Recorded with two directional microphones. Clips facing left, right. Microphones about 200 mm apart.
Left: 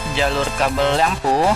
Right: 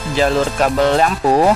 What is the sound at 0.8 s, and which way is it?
Speech, 50° right (ahead or behind).